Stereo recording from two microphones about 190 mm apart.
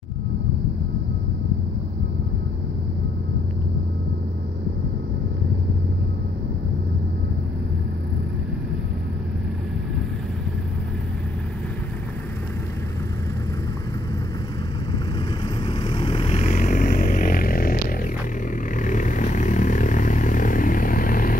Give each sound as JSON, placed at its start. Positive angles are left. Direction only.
{"t": 15.6, "sound": "vehicle", "side_deg": 25}